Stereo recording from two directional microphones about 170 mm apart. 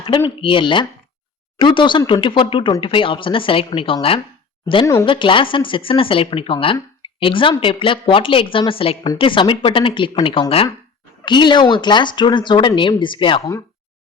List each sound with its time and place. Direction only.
0.4 s a woman's voice: 30° left (ahead or behind)
7.0 s a sound: 30° left (ahead or behind)
7.6 s a woman's voice: 30° left (ahead or behind)